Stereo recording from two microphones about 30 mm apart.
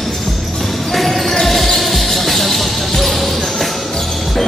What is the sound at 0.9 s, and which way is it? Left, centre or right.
Basketball bounce, centre.